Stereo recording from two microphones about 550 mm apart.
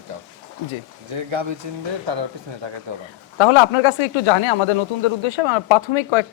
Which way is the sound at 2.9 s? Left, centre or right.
Right.